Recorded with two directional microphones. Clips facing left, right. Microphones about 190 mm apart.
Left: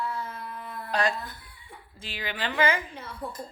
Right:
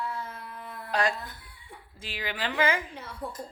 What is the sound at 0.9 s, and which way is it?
A woman's voice, 5° right (ahead or behind).